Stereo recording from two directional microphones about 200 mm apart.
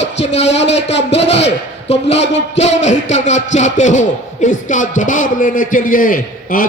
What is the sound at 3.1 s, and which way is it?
A man's voice, 35° left (ahead or behind).